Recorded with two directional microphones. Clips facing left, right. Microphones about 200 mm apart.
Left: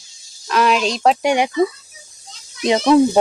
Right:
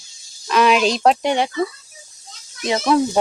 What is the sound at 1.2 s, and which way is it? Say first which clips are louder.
Speech: left 2 dB; 10° left (ahead or behind).